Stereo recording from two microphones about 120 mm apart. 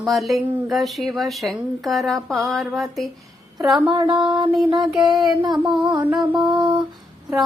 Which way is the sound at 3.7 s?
35° right (ahead or behind).